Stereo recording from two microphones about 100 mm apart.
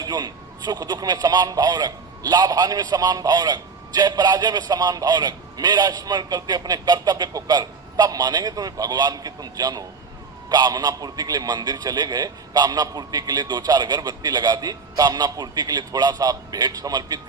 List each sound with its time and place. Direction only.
0.0 s a man's voice: 40° right (ahead or behind)